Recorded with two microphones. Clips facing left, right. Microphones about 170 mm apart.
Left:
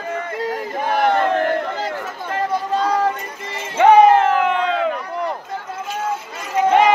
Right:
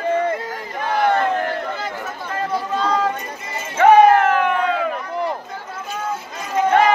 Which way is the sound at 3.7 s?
20° left (ahead or behind).